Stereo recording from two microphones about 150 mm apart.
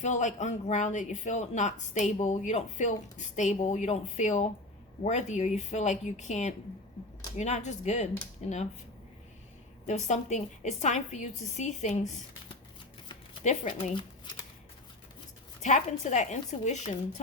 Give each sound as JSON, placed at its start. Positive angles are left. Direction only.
{"t": 0.0, "sound": "speech", "side_deg": 55}
{"t": 9.8, "sound": "speech", "side_deg": 50}
{"t": 13.4, "sound": "speech", "side_deg": 55}
{"t": 15.6, "sound": "speech", "side_deg": 55}